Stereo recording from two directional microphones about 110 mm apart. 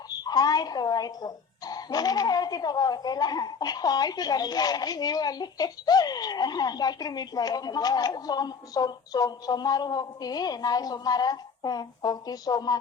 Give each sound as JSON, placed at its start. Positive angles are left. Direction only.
{"t": 0.1, "sound": "speech", "side_deg": 35}